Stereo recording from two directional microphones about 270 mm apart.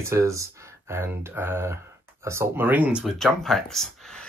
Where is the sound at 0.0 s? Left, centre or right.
Centre.